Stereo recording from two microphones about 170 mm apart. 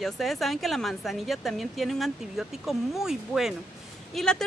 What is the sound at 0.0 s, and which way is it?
Speech, centre (ahead or behind).